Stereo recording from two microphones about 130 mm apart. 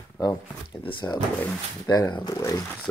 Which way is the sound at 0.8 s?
35° left (ahead or behind).